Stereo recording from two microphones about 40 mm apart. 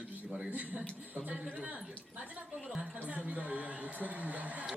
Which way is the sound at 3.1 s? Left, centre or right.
Right.